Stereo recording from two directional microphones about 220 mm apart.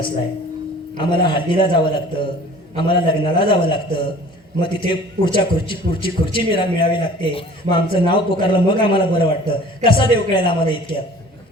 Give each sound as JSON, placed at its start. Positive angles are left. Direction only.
{"t": 0.9, "sound": "a man's voice", "side_deg": 20}